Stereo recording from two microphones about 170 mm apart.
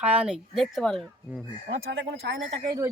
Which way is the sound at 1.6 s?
90° right.